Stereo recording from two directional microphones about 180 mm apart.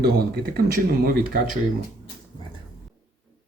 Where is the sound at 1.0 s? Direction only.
55° right (ahead or behind).